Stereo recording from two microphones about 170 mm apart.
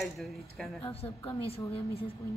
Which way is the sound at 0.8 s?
35° left (ahead or behind).